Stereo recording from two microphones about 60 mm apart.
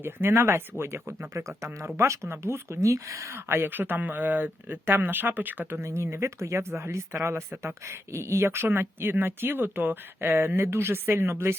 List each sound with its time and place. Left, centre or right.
0.0 s speech: right
1.3 s speech: right
3.5 s speech: right
5.8 s speech: right